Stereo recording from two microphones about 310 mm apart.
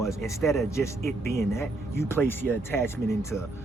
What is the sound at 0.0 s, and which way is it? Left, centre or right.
A man's voice, centre.